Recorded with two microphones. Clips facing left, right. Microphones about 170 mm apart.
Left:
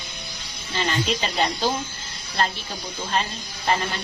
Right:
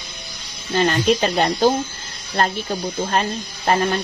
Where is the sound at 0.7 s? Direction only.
50° right (ahead or behind).